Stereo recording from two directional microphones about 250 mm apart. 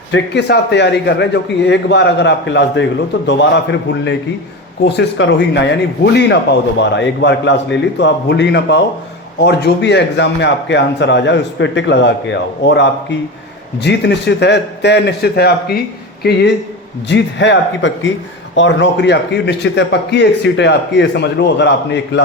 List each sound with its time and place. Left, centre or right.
0.1 s speech: left